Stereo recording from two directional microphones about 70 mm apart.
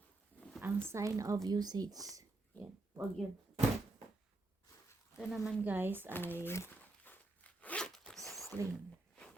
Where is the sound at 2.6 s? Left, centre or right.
Left.